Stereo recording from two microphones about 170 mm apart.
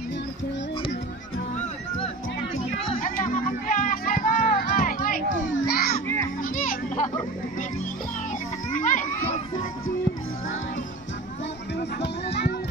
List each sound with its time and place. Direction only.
3.0 s music: 55° left (ahead or behind)
5.3 s children playing: 90° left
6.5 s children playing: 55° left (ahead or behind)
8.7 s children playing: 50° left (ahead or behind)
12.0 s music: 75° left (ahead or behind)